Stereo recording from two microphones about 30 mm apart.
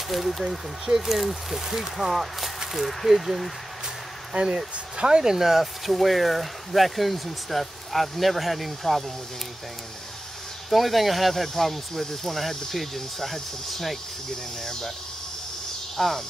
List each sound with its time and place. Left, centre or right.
0.1 s speech: centre
4.3 s speech: right
5.3 s speech: centre
10.7 s speech: centre
14.6 s speech: centre
16.0 s speech: centre